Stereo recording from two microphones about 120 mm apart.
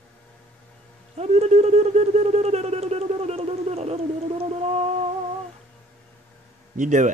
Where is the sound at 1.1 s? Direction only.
65° right (ahead or behind).